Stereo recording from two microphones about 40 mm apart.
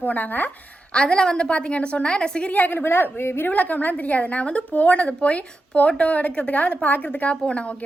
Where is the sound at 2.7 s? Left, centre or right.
Left.